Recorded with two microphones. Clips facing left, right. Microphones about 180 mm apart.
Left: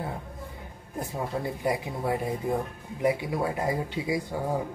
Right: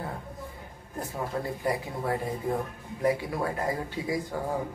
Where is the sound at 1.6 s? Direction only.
15° left (ahead or behind).